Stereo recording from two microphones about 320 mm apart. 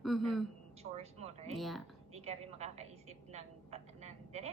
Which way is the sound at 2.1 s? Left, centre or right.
Centre.